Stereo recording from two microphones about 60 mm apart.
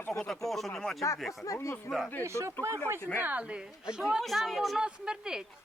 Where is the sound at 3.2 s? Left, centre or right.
Right.